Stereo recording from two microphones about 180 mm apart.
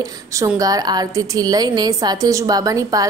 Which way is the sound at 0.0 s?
15° right (ahead or behind).